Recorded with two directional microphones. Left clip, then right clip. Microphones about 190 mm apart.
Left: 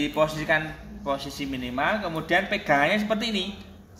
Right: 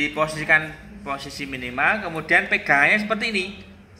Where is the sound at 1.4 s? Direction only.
45° left (ahead or behind).